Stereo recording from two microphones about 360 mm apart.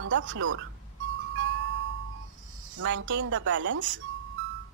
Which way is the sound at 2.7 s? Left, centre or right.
Right.